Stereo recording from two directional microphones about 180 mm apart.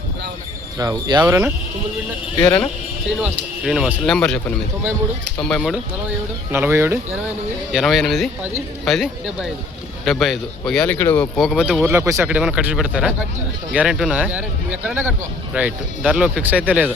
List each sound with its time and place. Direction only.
0.8 s speech: 20° right (ahead or behind)
1.3 s speech: 5° right (ahead or behind)
2.4 s speech: 10° left (ahead or behind)
3.2 s speech: 5° right (ahead or behind)
6.5 s speech: 10° right (ahead or behind)
7.7 s speech: centre (ahead or behind)
11.9 s speech: 15° right (ahead or behind)